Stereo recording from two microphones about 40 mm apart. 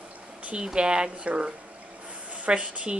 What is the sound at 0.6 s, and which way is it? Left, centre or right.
Speech, right.